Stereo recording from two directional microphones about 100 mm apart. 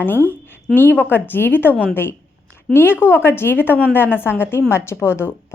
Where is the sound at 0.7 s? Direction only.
20° left (ahead or behind).